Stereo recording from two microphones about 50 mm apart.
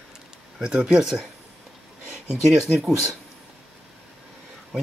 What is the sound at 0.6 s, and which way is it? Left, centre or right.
Speech, right.